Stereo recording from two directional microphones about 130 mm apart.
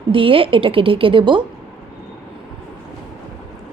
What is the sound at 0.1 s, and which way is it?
A woman's voice, 45° right (ahead or behind).